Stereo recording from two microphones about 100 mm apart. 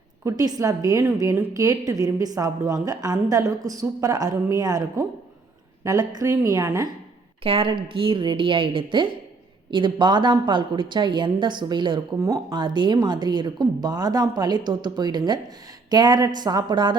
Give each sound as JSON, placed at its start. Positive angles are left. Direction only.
{"t": 0.3, "sound": "a woman's voice", "side_deg": -40}
{"t": 7.4, "sound": "a woman's voice", "side_deg": -65}
{"t": 12.2, "sound": "a woman's voice", "side_deg": -35}
{"t": 12.5, "sound": "a woman's voice", "side_deg": -50}